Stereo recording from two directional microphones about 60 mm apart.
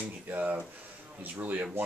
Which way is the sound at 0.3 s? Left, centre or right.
Right.